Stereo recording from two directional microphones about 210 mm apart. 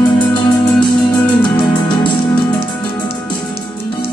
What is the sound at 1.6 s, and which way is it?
Music, 20° left (ahead or behind).